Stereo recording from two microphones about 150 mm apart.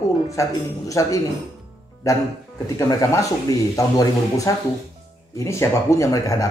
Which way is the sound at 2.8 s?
20° left (ahead or behind).